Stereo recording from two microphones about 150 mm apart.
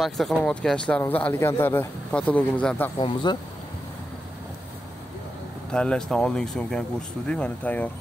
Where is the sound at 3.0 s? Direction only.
30° left (ahead or behind).